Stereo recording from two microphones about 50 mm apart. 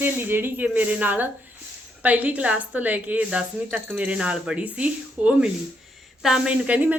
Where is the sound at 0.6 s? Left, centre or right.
Right.